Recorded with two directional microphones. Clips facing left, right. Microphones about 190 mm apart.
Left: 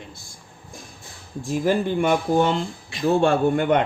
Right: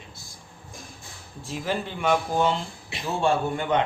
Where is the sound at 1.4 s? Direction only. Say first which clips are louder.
Left 8 dB; 45° left (ahead or behind).